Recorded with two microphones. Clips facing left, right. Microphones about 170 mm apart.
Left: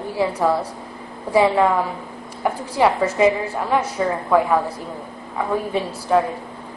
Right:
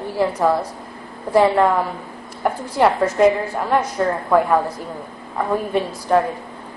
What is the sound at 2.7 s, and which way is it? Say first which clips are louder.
A woman's voice: right 1 dB; 10° left (ahead or behind).